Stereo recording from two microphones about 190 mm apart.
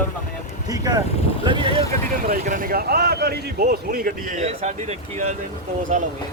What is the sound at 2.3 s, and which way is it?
Speech, 45° right (ahead or behind).